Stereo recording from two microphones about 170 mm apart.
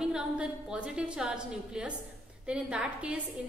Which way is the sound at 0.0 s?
5° right (ahead or behind).